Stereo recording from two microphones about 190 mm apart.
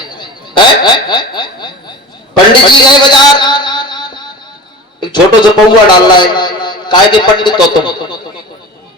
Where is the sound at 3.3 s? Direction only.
25° left (ahead or behind).